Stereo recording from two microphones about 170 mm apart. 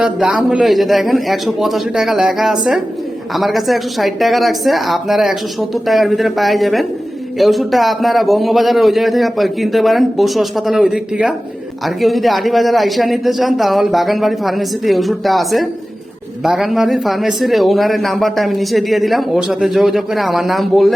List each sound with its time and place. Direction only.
0.0 s speech: 5° right (ahead or behind)